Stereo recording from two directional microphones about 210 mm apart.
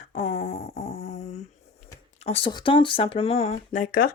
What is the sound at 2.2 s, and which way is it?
Speech, 25° left (ahead or behind).